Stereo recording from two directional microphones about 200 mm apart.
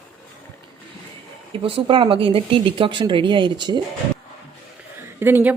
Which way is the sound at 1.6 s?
25° right (ahead or behind).